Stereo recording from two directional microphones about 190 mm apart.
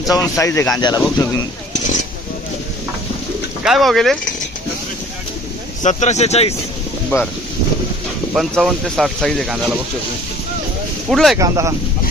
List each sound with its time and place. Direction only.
0.1 s speech: 15° left (ahead or behind)
3.6 s speech: centre (ahead or behind)
5.8 s speech: 35° left (ahead or behind)
7.1 s speech: 15° left (ahead or behind)
8.3 s speech: centre (ahead or behind)
11.1 s speech: centre (ahead or behind)
11.3 s speech: 15° right (ahead or behind)